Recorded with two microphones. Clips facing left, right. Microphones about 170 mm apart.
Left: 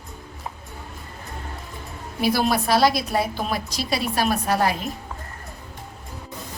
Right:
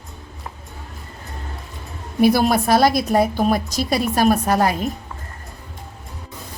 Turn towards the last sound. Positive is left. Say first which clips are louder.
# right 5 dB
turn(degrees=-45)  # may be behind; listen again after turning